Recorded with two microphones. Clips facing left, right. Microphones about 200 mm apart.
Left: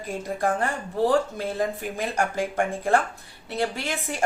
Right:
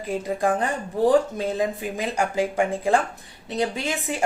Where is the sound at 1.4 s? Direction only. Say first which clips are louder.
Right 2 dB; 15° right (ahead or behind).